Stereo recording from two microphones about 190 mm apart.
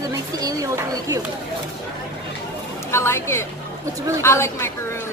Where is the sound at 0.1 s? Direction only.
20° right (ahead or behind).